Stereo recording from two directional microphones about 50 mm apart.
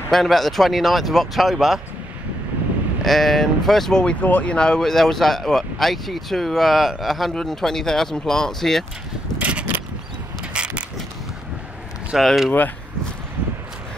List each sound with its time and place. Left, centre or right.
0.1 s speech: centre
3.0 s speech: centre
4.2 s speech: left; by 8.8 s centre
9.4 s a sound: right
12.2 s speech: centre